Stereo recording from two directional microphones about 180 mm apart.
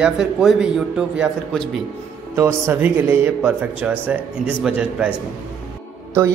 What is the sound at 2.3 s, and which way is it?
A man's voice, 15° right (ahead or behind).